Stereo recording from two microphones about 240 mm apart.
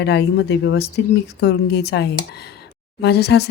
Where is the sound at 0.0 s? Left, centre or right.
Left.